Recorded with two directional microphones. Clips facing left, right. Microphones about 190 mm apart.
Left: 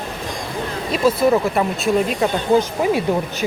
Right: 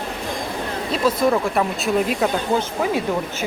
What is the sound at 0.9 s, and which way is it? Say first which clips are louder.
Speech: left 3 dB; 10° left (ahead or behind).